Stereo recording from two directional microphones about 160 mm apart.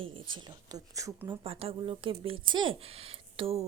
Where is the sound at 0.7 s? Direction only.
20° right (ahead or behind).